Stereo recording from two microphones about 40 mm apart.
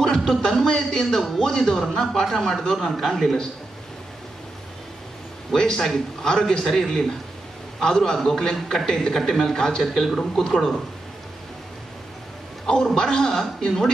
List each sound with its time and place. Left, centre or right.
0.0 s a man's voice: centre
5.5 s a man's voice: centre
12.6 s a man's voice: centre